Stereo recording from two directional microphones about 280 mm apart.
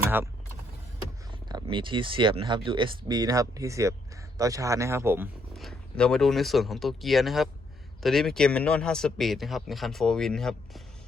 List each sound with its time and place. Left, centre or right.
0.0 s vehicle: centre
1.3 s speech: centre